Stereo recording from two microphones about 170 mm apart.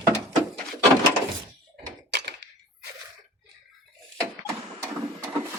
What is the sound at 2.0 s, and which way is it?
Door, 85° right.